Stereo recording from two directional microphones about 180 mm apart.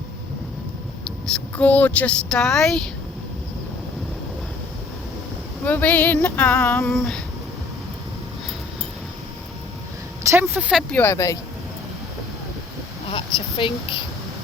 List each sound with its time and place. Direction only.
1.3 s speech: 5° left (ahead or behind)
5.6 s female singing: 10° left (ahead or behind)
10.2 s speech: 15° right (ahead or behind)
10.9 s female singing: 15° left (ahead or behind)
13.6 s speech: 30° left (ahead or behind)